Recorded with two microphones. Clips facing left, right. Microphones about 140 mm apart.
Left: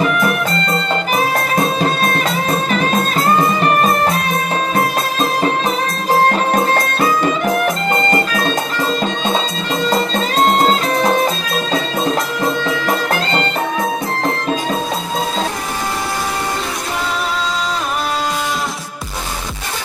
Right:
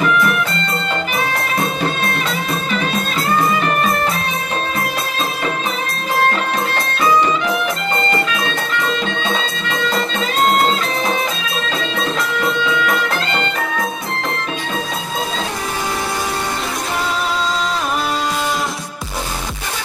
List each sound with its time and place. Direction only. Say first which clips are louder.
6.3 s music: left 5 dB; 45° left (ahead or behind)